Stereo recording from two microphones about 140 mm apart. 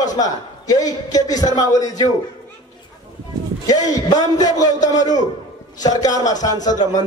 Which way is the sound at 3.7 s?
25° left (ahead or behind).